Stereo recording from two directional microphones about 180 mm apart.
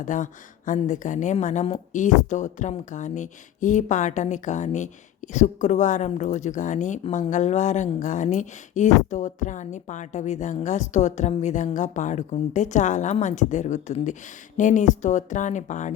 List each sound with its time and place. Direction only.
0.0 s a woman's voice: 45° left (ahead or behind)